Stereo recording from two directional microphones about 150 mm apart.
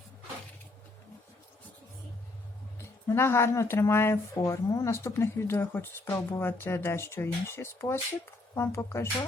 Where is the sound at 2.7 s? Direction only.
15° left (ahead or behind).